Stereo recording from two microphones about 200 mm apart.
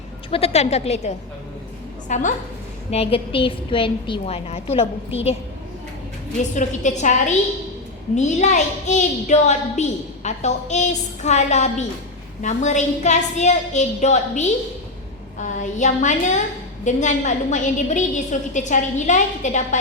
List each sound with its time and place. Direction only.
0.3 s a woman's voice: 30° left (ahead or behind)
6.4 s a woman's voice: 35° left (ahead or behind)